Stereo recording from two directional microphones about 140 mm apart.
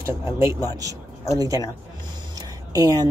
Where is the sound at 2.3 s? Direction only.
25° right (ahead or behind).